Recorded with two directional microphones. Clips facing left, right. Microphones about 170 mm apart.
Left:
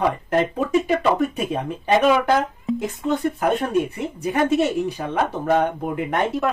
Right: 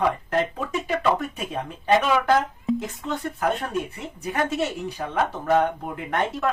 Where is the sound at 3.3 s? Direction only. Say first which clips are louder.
Left 5 dB; 15° left (ahead or behind).